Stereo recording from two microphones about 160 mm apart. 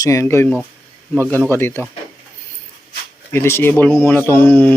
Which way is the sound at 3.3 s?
15° left (ahead or behind).